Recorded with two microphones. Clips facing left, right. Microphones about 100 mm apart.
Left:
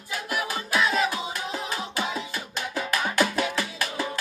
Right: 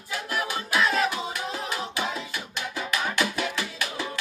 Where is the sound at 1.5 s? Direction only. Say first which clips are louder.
Even; 35° left (ahead or behind).